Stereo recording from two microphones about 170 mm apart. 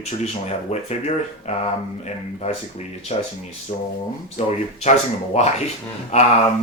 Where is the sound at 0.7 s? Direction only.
40° left (ahead or behind).